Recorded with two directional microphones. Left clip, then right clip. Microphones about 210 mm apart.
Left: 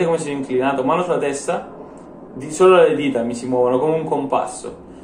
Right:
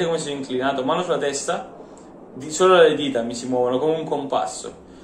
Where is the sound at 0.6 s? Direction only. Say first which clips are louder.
Left 4 dB; 30° right (ahead or behind).